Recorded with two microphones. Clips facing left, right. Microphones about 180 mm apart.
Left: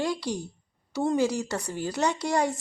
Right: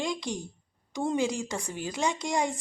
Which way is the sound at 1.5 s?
15° right (ahead or behind).